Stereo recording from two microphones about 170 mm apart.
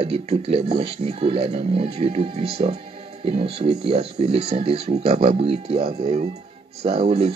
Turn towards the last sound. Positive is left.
turn(degrees=-40)  # may be behind; listen again after turning